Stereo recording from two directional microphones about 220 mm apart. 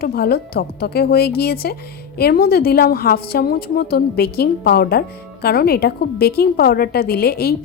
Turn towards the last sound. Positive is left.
turn(degrees=45)  # may be behind; listen again after turning